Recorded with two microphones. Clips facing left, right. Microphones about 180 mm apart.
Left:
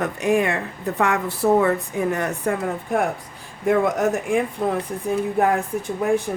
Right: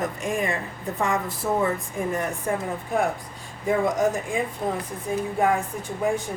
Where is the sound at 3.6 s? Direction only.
65° left (ahead or behind).